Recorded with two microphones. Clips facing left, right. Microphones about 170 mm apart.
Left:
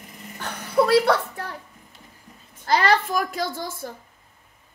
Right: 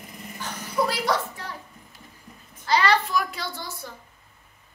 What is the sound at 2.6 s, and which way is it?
A woman's voice, 50° left (ahead or behind).